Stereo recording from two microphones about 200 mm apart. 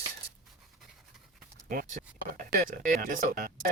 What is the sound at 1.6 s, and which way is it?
Speech, 45° right (ahead or behind).